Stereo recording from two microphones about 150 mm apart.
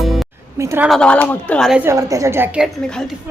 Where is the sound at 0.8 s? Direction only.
5° left (ahead or behind).